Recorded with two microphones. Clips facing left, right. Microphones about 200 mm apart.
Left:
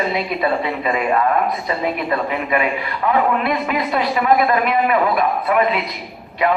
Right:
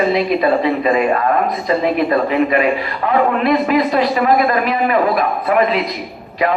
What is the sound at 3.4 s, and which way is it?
A man's voice, 35° right (ahead or behind).